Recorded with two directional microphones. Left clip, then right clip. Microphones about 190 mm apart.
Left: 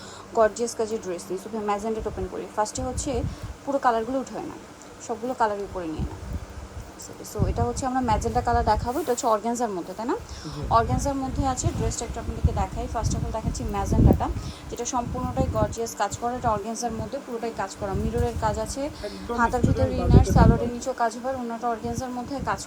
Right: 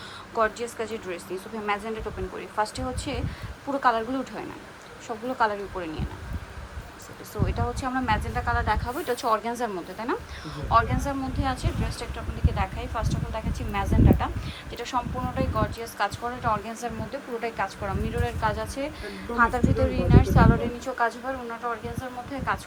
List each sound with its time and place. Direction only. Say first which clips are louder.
0.3 s speech: left 4 dB; 25° left (ahead or behind)
7.4 s speech: left 3 dB; 20° left (ahead or behind)